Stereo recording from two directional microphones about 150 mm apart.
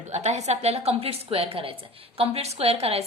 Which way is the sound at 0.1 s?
50° right (ahead or behind).